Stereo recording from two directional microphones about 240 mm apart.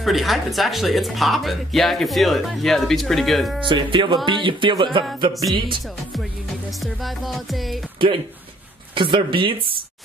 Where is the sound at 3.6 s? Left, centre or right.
Centre.